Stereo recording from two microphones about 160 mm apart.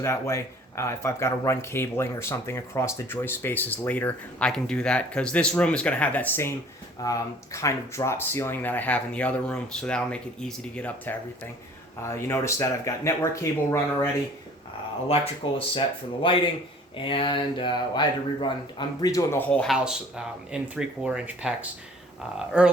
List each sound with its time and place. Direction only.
0.0 s speech: 15° left (ahead or behind)
15.0 s speech: 35° left (ahead or behind); by 19.7 s 10° left (ahead or behind)
19.7 s speech: 5° right (ahead or behind)